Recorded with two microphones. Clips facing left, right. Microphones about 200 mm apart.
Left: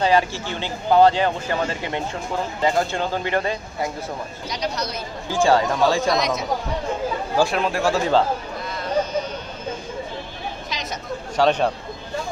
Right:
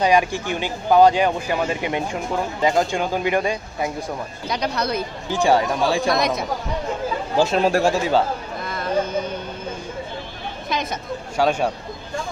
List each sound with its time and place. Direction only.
0.0 s speech: 15° right (ahead or behind)
4.5 s speech: 55° right (ahead or behind)
5.3 s speech: 15° right (ahead or behind)
6.0 s speech: 55° right (ahead or behind)
7.3 s speech: 20° right (ahead or behind)
7.9 s speech: 10° right (ahead or behind)
10.7 s a sound: 55° right (ahead or behind)
11.3 s speech: 5° right (ahead or behind)